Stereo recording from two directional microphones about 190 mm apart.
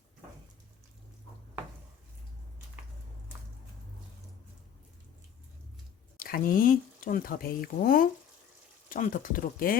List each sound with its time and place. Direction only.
6.1 s speech: 50° left (ahead or behind)